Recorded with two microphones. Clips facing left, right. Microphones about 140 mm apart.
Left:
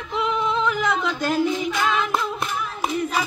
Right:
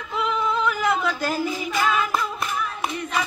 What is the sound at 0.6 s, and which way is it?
Female singing, 5° right (ahead or behind).